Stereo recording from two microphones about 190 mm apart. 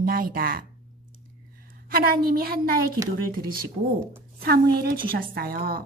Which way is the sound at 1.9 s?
50° right (ahead or behind).